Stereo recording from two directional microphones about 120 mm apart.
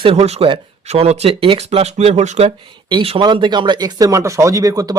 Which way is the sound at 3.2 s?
40° right (ahead or behind).